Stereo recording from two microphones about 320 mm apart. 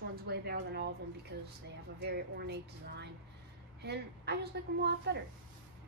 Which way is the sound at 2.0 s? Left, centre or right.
Right.